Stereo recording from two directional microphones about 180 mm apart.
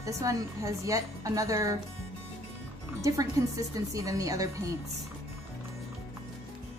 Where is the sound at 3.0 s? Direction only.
15° right (ahead or behind).